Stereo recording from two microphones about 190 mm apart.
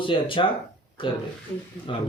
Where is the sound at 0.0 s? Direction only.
25° left (ahead or behind).